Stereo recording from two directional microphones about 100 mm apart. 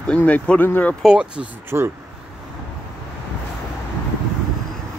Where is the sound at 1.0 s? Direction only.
10° right (ahead or behind).